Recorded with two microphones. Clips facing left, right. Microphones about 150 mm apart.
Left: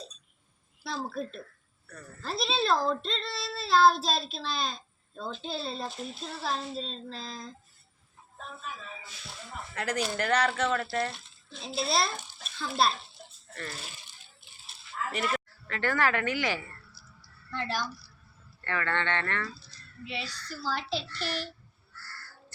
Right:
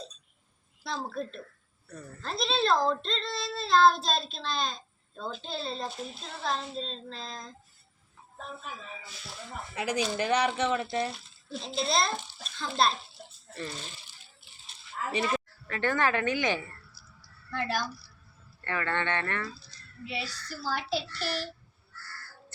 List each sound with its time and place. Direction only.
0.9 s speech: 5° left (ahead or behind)
9.7 s speech: 10° right (ahead or behind)
11.0 s a child's voice: centre (ahead or behind)
12.1 s bathtub: 15° left (ahead or behind)
12.5 s speech: 5° left (ahead or behind)
13.5 s speech: 15° right (ahead or behind)
14.4 s livestock: 20° left (ahead or behind)
15.1 s speech: 20° right (ahead or behind)
17.5 s a woman's voice: 10° right (ahead or behind)
20.1 s speech: 5° right (ahead or behind)